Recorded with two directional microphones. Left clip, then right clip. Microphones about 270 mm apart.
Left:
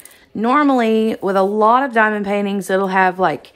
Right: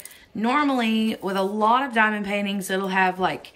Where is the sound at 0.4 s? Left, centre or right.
Centre.